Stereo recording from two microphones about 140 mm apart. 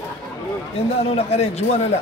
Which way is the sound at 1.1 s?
50° left (ahead or behind).